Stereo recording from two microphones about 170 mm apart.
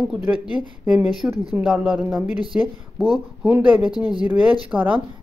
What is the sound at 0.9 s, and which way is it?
Speech, 10° right (ahead or behind).